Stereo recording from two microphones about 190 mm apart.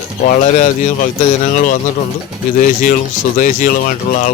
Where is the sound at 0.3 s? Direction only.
35° left (ahead or behind).